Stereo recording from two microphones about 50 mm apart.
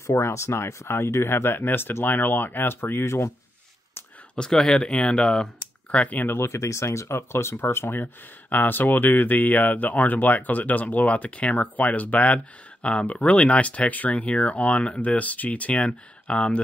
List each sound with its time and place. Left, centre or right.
0.0 s speech: left
4.4 s speech: centre
6.1 s speech: left
6.4 s speech: left
8.0 s speech: left